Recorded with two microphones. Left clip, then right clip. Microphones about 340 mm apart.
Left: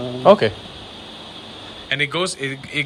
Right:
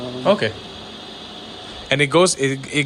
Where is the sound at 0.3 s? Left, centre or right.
Centre.